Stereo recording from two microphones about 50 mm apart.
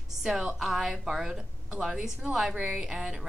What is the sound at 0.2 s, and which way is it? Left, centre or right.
A woman's voice, centre.